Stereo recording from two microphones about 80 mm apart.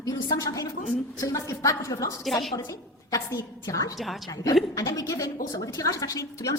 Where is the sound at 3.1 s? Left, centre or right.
Left.